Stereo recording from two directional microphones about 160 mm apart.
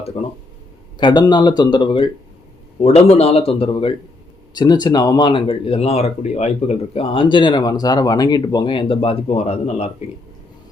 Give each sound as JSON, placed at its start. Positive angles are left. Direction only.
{"t": 0.2, "sound": "speech", "side_deg": 40}
{"t": 0.9, "sound": "speech", "side_deg": 25}
{"t": 2.8, "sound": "speech", "side_deg": 40}